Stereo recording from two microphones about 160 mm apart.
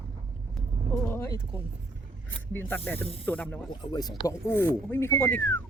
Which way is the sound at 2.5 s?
10° left (ahead or behind).